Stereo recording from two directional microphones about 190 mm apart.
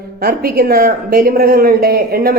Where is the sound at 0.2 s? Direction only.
55° right (ahead or behind).